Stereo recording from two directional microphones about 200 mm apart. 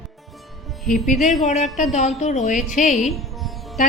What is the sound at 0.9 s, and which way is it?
Speech, 40° left (ahead or behind).